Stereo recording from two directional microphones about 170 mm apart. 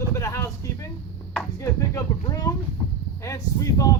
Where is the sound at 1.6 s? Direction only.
20° left (ahead or behind).